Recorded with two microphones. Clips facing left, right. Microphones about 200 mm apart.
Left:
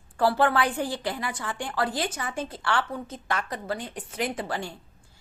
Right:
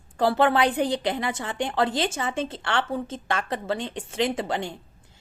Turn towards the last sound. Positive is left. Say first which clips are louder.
# right 4 dB
turn(degrees=-20)  # may be behind; listen again after turning